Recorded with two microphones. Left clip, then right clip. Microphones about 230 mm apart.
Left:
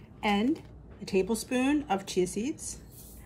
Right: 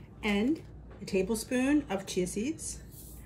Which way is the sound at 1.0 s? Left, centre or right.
Centre.